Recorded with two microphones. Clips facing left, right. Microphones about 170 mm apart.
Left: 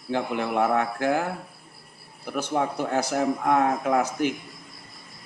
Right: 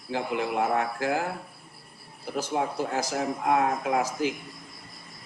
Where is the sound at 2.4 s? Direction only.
65° left (ahead or behind).